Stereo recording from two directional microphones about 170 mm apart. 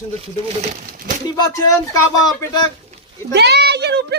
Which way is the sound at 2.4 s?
20° left (ahead or behind).